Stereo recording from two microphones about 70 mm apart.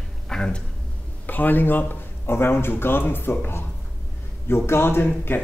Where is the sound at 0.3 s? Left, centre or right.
Centre.